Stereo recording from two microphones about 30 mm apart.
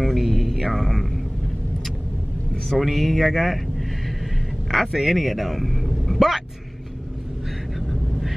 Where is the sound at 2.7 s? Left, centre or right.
Centre.